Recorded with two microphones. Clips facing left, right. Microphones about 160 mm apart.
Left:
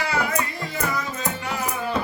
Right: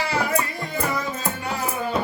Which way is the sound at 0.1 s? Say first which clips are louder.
Right 1 dB; 20° right (ahead or behind).